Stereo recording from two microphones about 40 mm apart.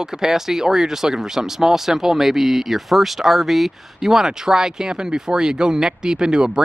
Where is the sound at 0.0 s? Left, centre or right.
Centre.